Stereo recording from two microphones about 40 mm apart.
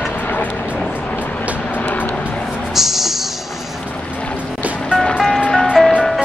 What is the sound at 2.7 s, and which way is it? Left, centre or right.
Music, centre.